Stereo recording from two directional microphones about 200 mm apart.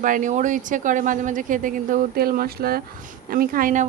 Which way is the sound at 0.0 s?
40° right (ahead or behind).